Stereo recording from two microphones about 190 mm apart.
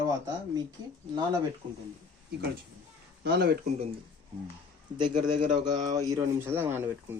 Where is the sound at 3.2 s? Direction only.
55° right (ahead or behind).